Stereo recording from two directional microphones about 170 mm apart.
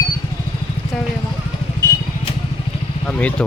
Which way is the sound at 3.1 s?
10° left (ahead or behind).